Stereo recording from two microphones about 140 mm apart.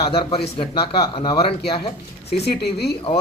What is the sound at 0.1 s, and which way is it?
A man's voice, 40° left (ahead or behind).